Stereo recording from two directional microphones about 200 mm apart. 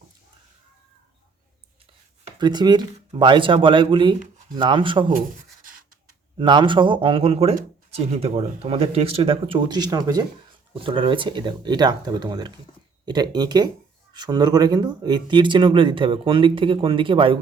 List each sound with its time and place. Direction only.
2.2 s speech: 20° right (ahead or behind)
4.2 s a sound: 40° right (ahead or behind)
4.5 s speech: 25° right (ahead or behind)
6.3 s speech: 25° right (ahead or behind)